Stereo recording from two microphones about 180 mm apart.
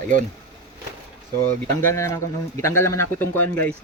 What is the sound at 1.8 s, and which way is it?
A man's voice, 15° left (ahead or behind).